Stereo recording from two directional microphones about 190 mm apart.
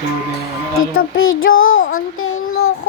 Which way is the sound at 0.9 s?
90° left.